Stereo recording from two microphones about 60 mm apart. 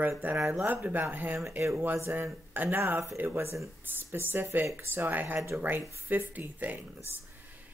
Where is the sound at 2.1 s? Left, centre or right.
Right.